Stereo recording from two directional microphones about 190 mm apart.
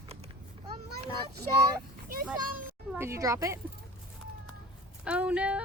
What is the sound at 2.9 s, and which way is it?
Speech, 15° right (ahead or behind).